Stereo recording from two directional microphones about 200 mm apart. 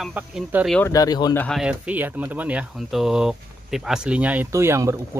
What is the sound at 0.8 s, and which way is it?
Speech, 15° left (ahead or behind).